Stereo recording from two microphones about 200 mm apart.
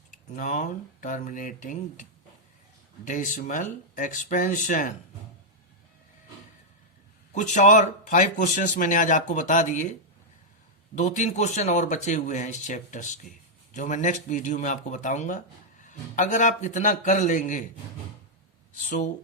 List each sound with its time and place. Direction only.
0.1 s speech: 40° left (ahead or behind)
7.3 s speech: 35° left (ahead or behind)
10.9 s speech: 35° left (ahead or behind)
18.9 s speech: 40° left (ahead or behind)